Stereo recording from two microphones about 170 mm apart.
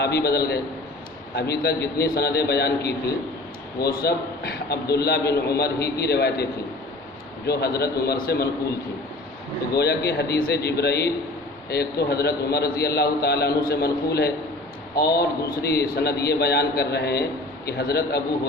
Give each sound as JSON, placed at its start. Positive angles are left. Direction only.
{"t": 0.0, "sound": "a man's voice", "side_deg": 70}
{"t": 9.7, "sound": "a man's voice", "side_deg": 70}